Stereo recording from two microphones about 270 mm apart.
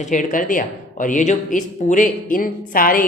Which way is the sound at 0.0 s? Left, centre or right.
Left.